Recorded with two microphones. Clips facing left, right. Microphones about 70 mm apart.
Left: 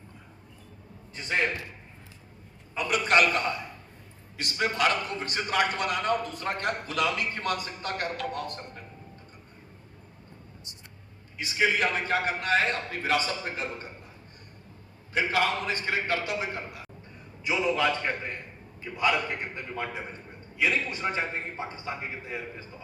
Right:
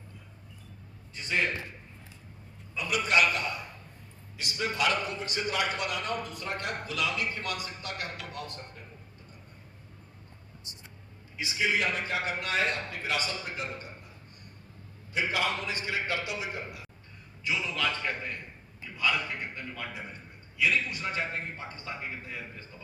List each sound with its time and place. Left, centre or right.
2.7 s a sound: left
4.4 s a man's voice: left
11.4 s a man's voice: left
15.1 s a man's voice: left
17.4 s a man's voice: left